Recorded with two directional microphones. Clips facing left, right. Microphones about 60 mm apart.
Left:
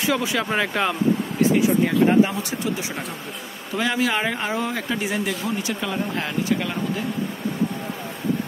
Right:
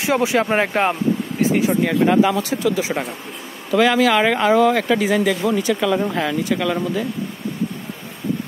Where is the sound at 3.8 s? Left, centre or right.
Right.